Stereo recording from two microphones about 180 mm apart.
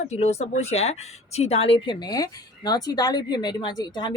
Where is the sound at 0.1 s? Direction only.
35° left (ahead or behind).